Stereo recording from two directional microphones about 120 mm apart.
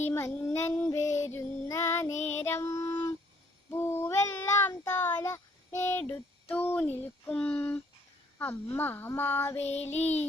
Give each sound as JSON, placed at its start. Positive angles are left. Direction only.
{"t": 0.0, "sound": "child singing", "side_deg": 20}
{"t": 2.5, "sound": "music", "side_deg": 25}
{"t": 3.7, "sound": "child singing", "side_deg": 20}
{"t": 8.4, "sound": "a sound", "side_deg": 15}
{"t": 9.7, "sound": "child singing", "side_deg": 65}